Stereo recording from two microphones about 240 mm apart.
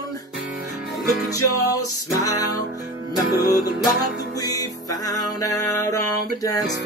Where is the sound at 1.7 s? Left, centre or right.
Centre.